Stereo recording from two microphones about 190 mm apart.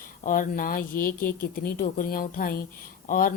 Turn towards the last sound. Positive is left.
turn(degrees=45)  # may be behind; listen again after turning